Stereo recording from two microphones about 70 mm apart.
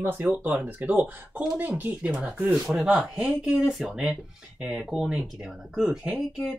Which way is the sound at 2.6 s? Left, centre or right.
Centre.